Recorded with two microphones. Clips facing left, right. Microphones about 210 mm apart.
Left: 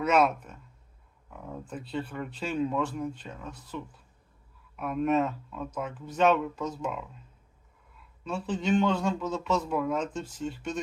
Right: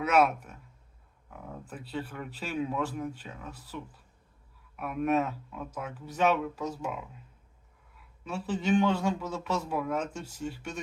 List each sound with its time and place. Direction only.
0.1 s a man's voice: 5° right (ahead or behind)
1.6 s speech: 5° right (ahead or behind)
4.8 s a man's voice: 5° right (ahead or behind)
8.2 s a man's voice: 5° right (ahead or behind)